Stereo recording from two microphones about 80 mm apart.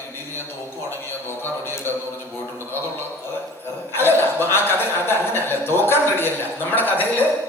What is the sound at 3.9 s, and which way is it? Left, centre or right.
A man's voice, left.